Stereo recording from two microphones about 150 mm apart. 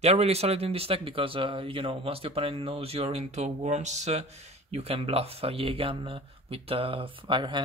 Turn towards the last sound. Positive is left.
turn(degrees=-30)  # may be behind; listen again after turning